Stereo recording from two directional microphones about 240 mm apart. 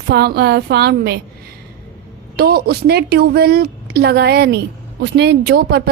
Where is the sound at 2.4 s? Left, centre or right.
Right.